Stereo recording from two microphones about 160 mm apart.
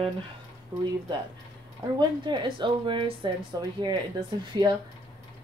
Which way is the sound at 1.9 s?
30° right (ahead or behind).